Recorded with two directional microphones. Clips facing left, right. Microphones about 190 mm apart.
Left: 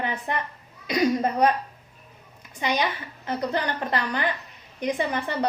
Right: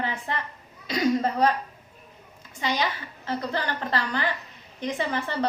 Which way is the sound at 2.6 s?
15° left (ahead or behind).